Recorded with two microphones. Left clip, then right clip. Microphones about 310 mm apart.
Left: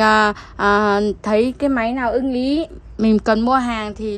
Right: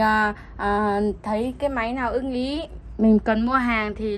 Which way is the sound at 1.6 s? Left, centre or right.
Left.